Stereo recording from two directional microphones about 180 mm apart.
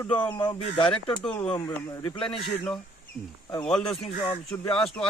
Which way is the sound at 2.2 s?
30° left (ahead or behind).